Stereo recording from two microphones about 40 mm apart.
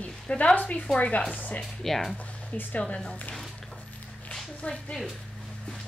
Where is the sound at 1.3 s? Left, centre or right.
Left.